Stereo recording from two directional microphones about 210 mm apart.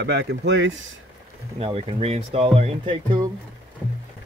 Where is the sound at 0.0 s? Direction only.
55° right (ahead or behind).